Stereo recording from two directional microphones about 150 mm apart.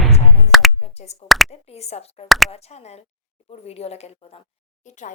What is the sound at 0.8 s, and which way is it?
A woman's voice, 45° left (ahead or behind).